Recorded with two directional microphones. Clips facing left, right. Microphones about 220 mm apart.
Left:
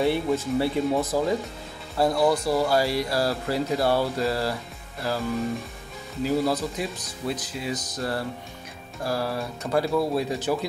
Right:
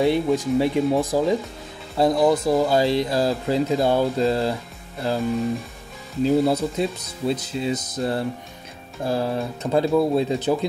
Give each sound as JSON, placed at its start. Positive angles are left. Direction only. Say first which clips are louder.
{"t": 0.0, "sound": "speech", "louder": "right 4 dB", "side_deg": -15}
{"t": 6.2, "sound": "speech", "louder": "right 5 dB", "side_deg": -25}